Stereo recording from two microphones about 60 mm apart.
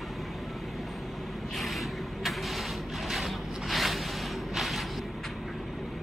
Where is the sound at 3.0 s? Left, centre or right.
Centre.